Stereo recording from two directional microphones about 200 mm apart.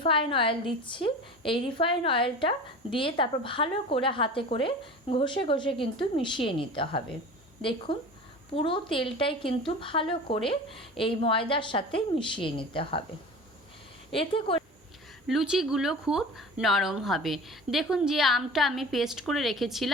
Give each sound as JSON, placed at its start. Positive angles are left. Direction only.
{"t": 0.0, "sound": "a woman's voice", "side_deg": 25}
{"t": 14.1, "sound": "a woman's voice", "side_deg": 25}
{"t": 15.3, "sound": "speech", "side_deg": 0}